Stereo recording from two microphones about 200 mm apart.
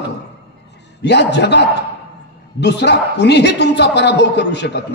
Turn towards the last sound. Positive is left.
turn(degrees=60)  # may be behind; listen again after turning